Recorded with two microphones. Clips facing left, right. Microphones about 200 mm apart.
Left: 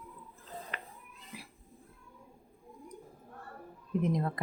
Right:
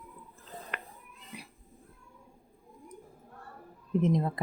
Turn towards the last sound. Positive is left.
turn(degrees=-25)  # may be behind; listen again after turning